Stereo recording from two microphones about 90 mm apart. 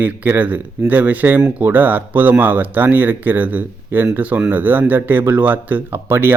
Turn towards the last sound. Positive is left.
turn(degrees=-25)  # may be behind; listen again after turning